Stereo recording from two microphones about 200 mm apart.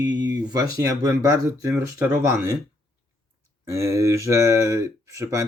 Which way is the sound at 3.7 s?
15° right (ahead or behind).